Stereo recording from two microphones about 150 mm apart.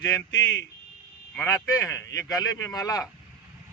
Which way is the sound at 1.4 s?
15° left (ahead or behind).